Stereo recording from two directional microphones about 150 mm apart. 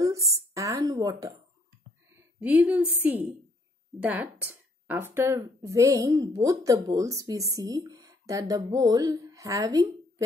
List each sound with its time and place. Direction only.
0.0 s speech: 20° right (ahead or behind)
2.4 s a woman's voice: 10° right (ahead or behind)